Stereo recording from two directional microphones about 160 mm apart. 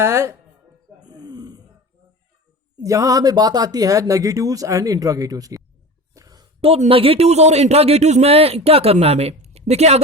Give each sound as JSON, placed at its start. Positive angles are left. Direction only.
{"t": 0.0, "sound": "speech", "side_deg": -15}
{"t": 1.0, "sound": "grunt", "side_deg": -25}
{"t": 2.8, "sound": "speech", "side_deg": -20}
{"t": 6.1, "sound": "a sound", "side_deg": -25}
{"t": 6.6, "sound": "a man's voice", "side_deg": -35}